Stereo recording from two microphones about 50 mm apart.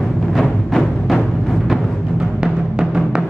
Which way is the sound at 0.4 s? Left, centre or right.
Centre.